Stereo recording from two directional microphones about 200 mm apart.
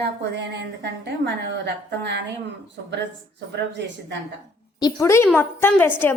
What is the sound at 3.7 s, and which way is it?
Speech, 60° right (ahead or behind).